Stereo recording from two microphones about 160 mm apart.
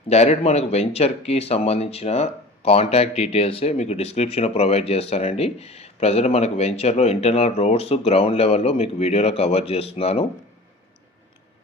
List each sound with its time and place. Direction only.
0.1 s speech: 40° left (ahead or behind)